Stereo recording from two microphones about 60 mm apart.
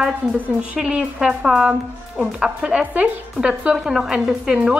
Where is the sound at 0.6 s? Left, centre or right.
Centre.